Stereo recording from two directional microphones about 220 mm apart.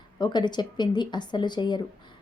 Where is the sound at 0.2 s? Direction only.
20° left (ahead or behind).